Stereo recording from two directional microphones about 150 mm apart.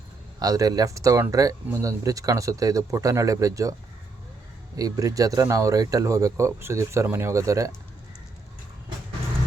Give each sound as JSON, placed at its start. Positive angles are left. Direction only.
{"t": 0.3, "sound": "speech", "side_deg": -25}
{"t": 4.8, "sound": "speech", "side_deg": -25}